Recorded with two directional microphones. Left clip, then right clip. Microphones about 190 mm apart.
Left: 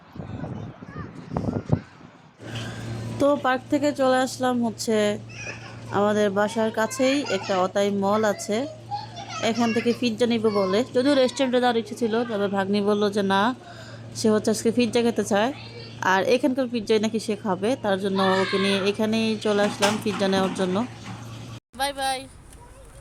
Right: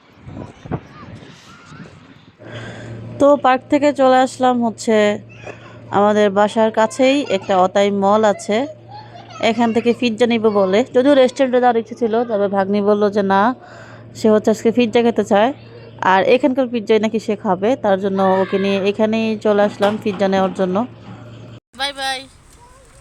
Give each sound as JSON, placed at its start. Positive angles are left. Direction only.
{"t": 3.2, "sound": "speech", "side_deg": -15}
{"t": 11.4, "sound": "a woman's voice", "side_deg": 5}
{"t": 11.9, "sound": "a woman's voice", "side_deg": 20}
{"t": 12.5, "sound": "speech", "side_deg": 0}
{"t": 21.8, "sound": "speech", "side_deg": 0}